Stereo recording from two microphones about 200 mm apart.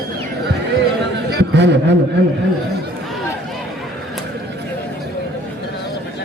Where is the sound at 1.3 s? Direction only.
60° right (ahead or behind).